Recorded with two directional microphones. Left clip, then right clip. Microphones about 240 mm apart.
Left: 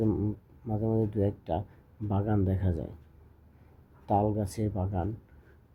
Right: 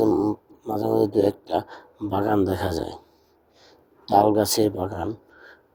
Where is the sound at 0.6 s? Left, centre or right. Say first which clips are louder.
Right 9 dB; right.